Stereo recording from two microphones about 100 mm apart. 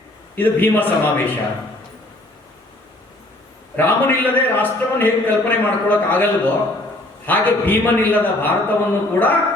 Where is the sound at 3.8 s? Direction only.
20° left (ahead or behind).